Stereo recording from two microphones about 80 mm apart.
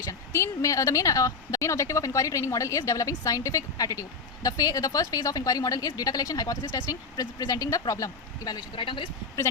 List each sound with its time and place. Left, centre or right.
0.1 s a woman's voice: left
8.5 s speech: left